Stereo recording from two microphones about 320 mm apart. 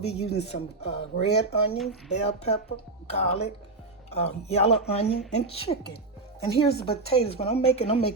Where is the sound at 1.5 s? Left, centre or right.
Centre.